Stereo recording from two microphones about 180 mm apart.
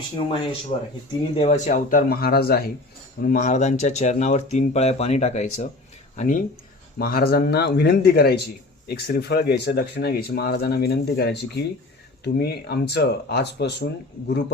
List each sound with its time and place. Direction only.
0.7 s speech: 35° left (ahead or behind); by 13.8 s 70° left (ahead or behind)